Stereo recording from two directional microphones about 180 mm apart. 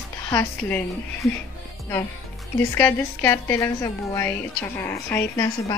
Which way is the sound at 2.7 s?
10° left (ahead or behind).